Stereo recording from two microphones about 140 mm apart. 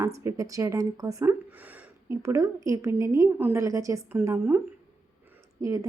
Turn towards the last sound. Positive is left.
turn(degrees=-20)  # may be behind; listen again after turning